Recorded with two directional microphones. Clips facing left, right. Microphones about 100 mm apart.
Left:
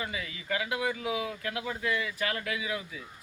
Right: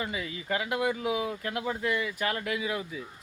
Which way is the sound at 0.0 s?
25° right (ahead or behind).